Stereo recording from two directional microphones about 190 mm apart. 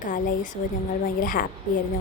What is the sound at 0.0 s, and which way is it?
Speech, 45° left (ahead or behind).